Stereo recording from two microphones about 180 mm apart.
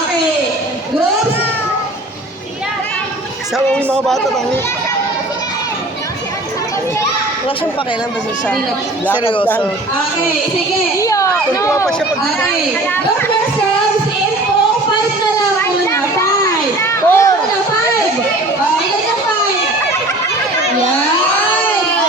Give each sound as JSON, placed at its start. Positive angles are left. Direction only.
{"t": 4.0, "sound": "speech", "side_deg": 0}
{"t": 9.2, "sound": "speech", "side_deg": 30}
{"t": 10.9, "sound": "a child's voice", "side_deg": 15}
{"t": 11.9, "sound": "speech", "side_deg": 5}
{"t": 15.5, "sound": "children playing", "side_deg": 15}